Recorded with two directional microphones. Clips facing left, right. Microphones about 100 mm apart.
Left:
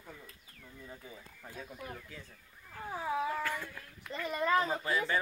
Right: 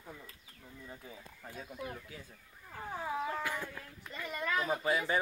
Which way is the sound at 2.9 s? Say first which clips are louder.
Left 3 dB; centre (ahead or behind).